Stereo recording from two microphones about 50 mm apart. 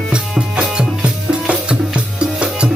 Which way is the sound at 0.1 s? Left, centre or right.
Centre.